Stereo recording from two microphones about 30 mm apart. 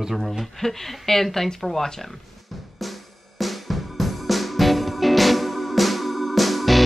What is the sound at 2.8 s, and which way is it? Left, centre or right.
Drum, centre.